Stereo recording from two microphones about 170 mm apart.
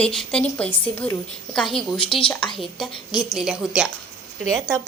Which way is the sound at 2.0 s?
30° left (ahead or behind).